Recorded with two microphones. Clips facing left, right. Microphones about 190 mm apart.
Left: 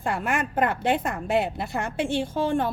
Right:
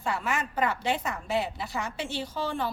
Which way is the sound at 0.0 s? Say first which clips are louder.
Left 4 dB; 55° left (ahead or behind).